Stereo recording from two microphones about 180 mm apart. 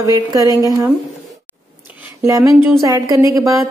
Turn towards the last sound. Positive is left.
turn(degrees=-15)  # may be behind; listen again after turning